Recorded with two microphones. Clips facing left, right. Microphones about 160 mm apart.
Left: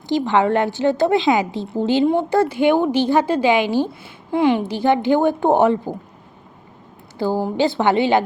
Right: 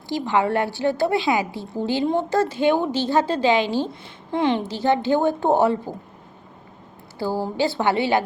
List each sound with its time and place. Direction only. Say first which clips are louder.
0.1 s a woman's voice: left 4 dB; 20° left (ahead or behind)
7.2 s a woman's voice: left 4 dB; 20° left (ahead or behind)